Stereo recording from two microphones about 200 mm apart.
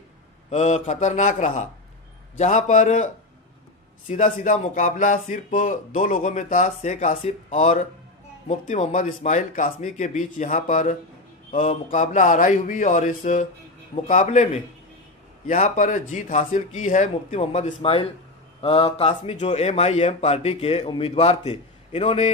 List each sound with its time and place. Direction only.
0.5 s speech: 35° left (ahead or behind)
4.1 s speech: 40° left (ahead or behind)